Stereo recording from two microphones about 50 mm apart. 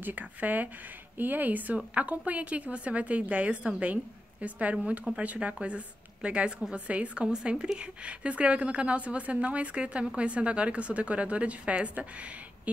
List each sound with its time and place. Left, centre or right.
0.0 s a woman's voice: right